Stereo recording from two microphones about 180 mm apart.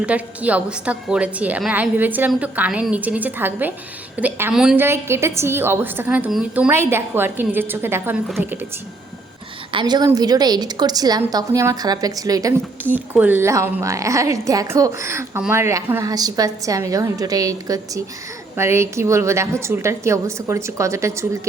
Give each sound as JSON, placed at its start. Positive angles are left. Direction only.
{"t": 0.0, "sound": "a woman's voice", "side_deg": -10}
{"t": 4.9, "sound": "a woman's voice", "side_deg": -15}
{"t": 9.7, "sound": "a woman's voice", "side_deg": -25}